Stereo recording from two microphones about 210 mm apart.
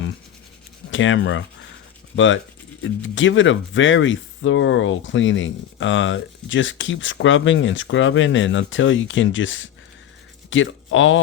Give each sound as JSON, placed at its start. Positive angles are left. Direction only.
{"t": 0.9, "sound": "speech", "side_deg": 65}